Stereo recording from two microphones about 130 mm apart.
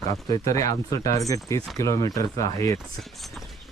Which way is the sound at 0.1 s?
25° left (ahead or behind).